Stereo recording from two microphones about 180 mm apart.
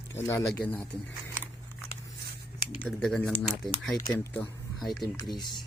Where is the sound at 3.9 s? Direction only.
20° left (ahead or behind).